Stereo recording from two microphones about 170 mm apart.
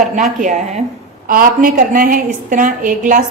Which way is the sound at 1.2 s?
55° right (ahead or behind).